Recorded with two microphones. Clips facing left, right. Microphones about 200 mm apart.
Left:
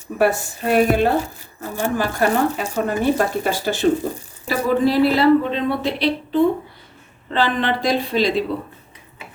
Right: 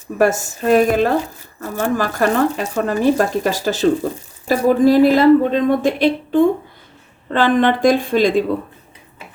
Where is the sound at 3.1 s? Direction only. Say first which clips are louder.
Right 3 dB; 40° right (ahead or behind).